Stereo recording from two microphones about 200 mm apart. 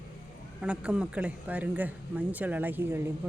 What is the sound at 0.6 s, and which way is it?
Speech, 5° right (ahead or behind).